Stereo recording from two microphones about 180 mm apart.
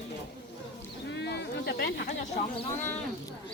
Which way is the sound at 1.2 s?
65° left (ahead or behind).